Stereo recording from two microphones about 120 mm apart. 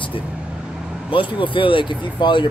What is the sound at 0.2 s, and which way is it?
Vehicle, 10° right (ahead or behind).